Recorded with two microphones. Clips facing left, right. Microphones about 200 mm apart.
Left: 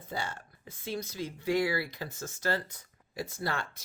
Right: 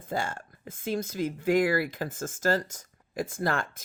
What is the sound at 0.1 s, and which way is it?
Speech, 50° right (ahead or behind).